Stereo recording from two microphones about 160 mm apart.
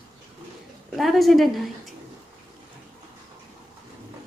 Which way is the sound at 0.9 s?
Centre (ahead or behind).